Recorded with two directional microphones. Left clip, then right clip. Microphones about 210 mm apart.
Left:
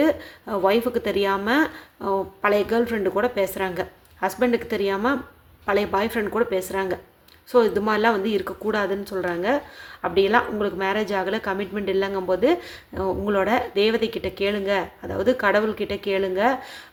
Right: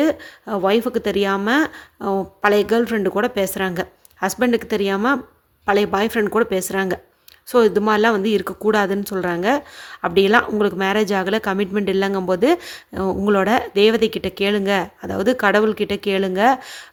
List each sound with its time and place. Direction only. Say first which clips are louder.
0.0 s speech: right 2 dB; 35° right (ahead or behind)